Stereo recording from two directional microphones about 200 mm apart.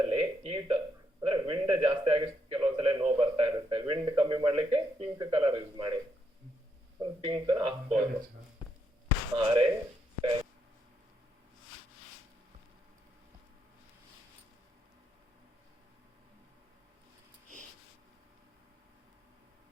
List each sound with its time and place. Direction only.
0.0 s a sound: 25° right (ahead or behind)
7.0 s speech: 20° right (ahead or behind)
9.3 s speech: 20° right (ahead or behind)